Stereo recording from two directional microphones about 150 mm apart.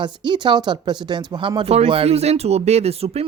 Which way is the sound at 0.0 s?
30° right (ahead or behind).